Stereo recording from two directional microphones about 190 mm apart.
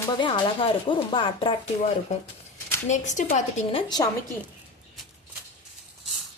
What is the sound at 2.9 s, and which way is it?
A woman's voice, 40° left (ahead or behind).